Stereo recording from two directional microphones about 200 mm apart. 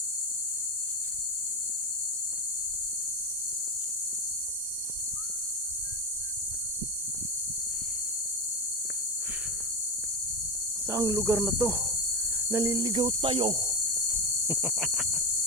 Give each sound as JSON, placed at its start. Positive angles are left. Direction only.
{"t": 10.8, "sound": "speech", "side_deg": -15}
{"t": 12.5, "sound": "cricket", "side_deg": -15}
{"t": 14.4, "sound": "cricket", "side_deg": -10}